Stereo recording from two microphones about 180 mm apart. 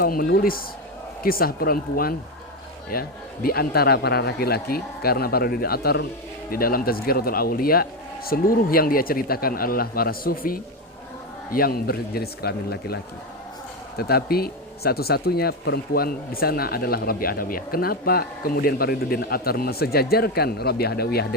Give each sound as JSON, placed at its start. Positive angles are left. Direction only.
{"t": 0.0, "sound": "speech", "side_deg": 55}
{"t": 14.0, "sound": "speech", "side_deg": 60}